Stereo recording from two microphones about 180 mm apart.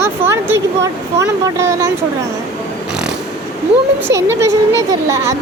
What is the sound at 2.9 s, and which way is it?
Vehicle, 5° right (ahead or behind).